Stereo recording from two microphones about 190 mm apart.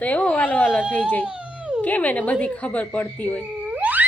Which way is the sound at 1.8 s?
10° left (ahead or behind).